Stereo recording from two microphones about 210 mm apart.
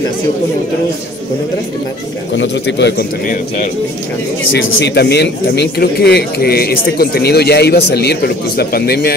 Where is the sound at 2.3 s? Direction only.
60° left (ahead or behind); by 3.7 s 40° left (ahead or behind).